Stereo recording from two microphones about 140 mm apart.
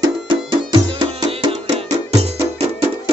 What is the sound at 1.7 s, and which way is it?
Music, 50° right (ahead or behind).